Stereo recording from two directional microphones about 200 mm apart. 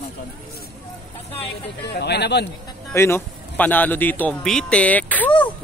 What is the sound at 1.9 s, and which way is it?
Speech, 55° left (ahead or behind).